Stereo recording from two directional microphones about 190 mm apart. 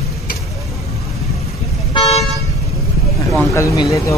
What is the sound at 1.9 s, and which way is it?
Toot, 35° left (ahead or behind).